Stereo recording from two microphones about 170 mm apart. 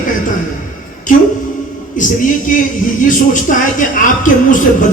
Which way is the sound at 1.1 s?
50° left (ahead or behind).